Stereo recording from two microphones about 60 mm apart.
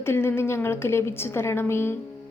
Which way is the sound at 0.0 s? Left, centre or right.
Left.